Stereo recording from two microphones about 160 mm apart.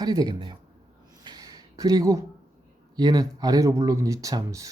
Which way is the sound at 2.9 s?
25° right (ahead or behind).